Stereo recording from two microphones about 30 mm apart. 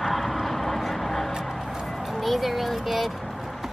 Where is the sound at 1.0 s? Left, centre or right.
Centre.